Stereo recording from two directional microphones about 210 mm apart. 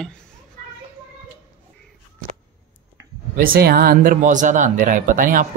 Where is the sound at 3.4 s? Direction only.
45° right (ahead or behind).